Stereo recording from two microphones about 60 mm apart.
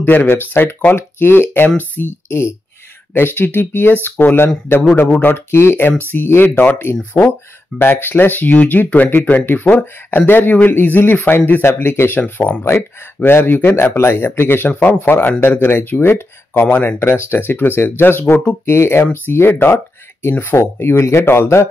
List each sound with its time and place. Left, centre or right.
0.0 s speech: left
12.6 s speech: left
13.9 s speech: left
14.7 s speech: left